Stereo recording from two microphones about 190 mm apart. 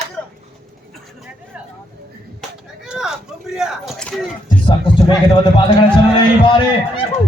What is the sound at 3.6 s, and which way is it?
Speech, centre (ahead or behind).